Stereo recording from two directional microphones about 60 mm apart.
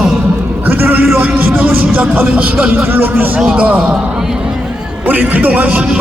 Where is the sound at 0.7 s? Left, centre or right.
Right.